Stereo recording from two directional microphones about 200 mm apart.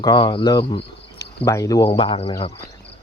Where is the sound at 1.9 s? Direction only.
25° left (ahead or behind).